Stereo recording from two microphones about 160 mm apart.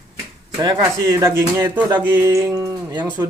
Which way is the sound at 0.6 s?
25° right (ahead or behind).